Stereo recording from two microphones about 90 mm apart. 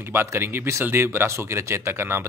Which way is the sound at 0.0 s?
25° right (ahead or behind).